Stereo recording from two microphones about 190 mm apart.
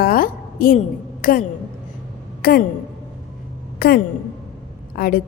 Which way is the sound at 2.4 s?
55° left (ahead or behind).